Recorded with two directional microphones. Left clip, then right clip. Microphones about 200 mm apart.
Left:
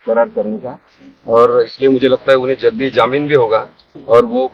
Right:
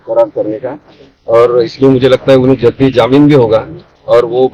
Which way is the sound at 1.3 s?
25° left (ahead or behind).